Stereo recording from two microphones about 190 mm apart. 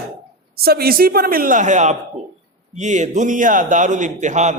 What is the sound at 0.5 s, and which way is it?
A man's voice, 55° right (ahead or behind).